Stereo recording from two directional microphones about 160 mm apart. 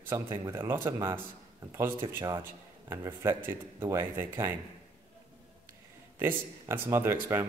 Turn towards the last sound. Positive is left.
turn(degrees=-15)  # may be behind; listen again after turning